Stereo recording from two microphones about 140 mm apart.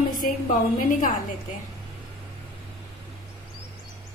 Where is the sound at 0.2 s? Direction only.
70° left (ahead or behind).